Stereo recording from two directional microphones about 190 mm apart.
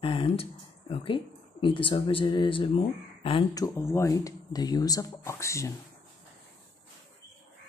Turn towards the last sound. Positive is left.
turn(degrees=15)  # may be behind; listen again after turning